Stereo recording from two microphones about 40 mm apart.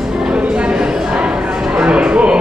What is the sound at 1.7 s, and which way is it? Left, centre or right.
Music, right.